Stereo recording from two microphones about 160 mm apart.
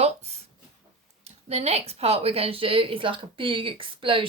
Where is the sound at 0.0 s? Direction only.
40° right (ahead or behind).